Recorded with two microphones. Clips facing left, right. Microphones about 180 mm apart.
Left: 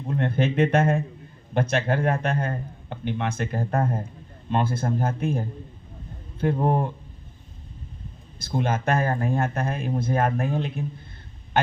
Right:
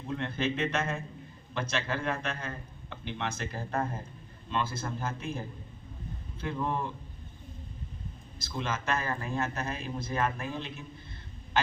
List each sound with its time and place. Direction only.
0.1 s speech: 55° left (ahead or behind)
8.4 s speech: 55° left (ahead or behind)